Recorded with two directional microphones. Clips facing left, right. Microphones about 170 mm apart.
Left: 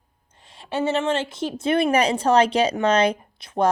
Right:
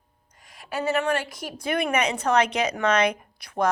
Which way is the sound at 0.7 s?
25° left (ahead or behind).